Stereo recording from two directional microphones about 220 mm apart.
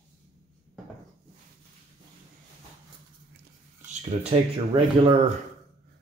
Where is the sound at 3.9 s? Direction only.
30° right (ahead or behind).